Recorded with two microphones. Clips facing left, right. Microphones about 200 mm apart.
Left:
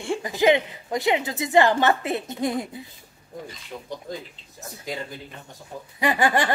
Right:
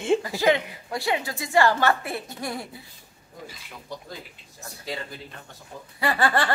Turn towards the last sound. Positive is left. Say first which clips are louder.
# left 2 dB
turn(degrees=15)  # may be behind; listen again after turning